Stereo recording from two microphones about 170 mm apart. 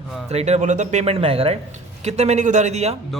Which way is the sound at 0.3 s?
40° right (ahead or behind).